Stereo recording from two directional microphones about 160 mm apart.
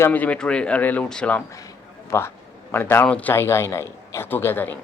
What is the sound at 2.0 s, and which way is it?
A man's voice, 15° left (ahead or behind).